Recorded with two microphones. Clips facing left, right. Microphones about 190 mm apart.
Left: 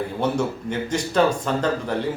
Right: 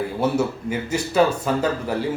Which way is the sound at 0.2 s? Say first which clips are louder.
Right 2 dB; 5° right (ahead or behind).